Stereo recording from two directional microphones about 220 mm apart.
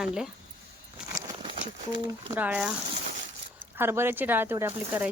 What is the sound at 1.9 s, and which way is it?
Speech, 20° right (ahead or behind).